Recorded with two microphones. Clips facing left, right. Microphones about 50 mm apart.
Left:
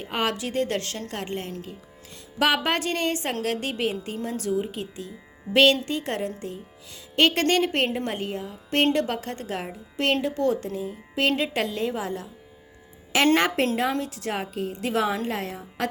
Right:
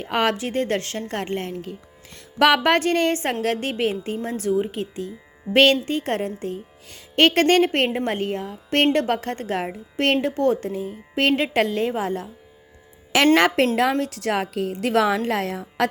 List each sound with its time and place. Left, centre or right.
0.0 s a woman's voice: right
0.3 s a woman's voice: right
2.1 s a woman's voice: right
13.3 s a woman's voice: right
14.0 s a woman's voice: right